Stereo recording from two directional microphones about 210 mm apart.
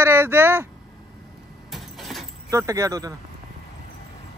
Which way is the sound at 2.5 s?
15° right (ahead or behind).